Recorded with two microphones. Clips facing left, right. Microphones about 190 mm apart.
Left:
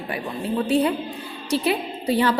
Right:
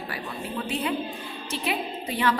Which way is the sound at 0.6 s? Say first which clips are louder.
Left 7 dB; 35° left (ahead or behind).